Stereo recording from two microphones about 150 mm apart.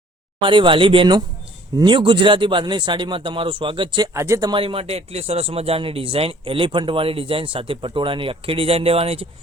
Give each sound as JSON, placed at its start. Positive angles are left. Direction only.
{"t": 0.3, "sound": "speech", "side_deg": -35}
{"t": 4.1, "sound": "speech", "side_deg": -20}